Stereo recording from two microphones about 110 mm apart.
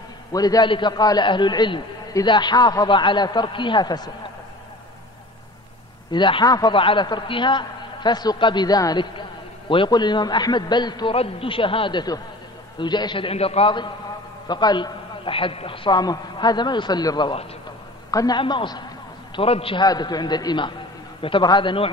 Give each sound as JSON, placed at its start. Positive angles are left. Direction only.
{"t": 0.3, "sound": "a man's voice", "side_deg": 35}
{"t": 0.7, "sound": "a man's voice", "side_deg": 45}
{"t": 6.1, "sound": "a man's voice", "side_deg": 45}
{"t": 6.7, "sound": "a man's voice", "side_deg": 50}
{"t": 11.1, "sound": "a man's voice", "side_deg": 55}
{"t": 14.5, "sound": "a man's voice", "side_deg": 40}
{"t": 16.0, "sound": "a man's voice", "side_deg": 40}
{"t": 18.4, "sound": "a man's voice", "side_deg": 45}
{"t": 19.3, "sound": "a man's voice", "side_deg": 60}
{"t": 19.8, "sound": "a man's voice", "side_deg": 40}